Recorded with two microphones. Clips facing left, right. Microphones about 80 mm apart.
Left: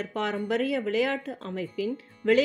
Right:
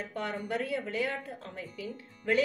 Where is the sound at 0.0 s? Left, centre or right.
Left.